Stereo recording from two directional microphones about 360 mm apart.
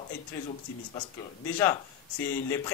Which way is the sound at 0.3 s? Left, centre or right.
Centre.